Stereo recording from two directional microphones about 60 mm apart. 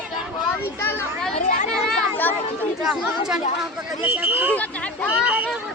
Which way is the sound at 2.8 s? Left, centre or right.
Centre.